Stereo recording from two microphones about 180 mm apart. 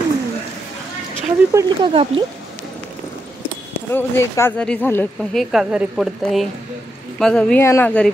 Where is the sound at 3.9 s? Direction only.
15° left (ahead or behind).